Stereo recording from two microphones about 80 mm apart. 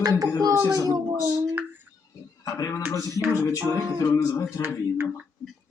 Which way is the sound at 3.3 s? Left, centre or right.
Left.